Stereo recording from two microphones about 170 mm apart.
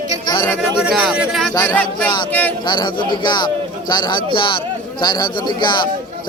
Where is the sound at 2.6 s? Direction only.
25° left (ahead or behind).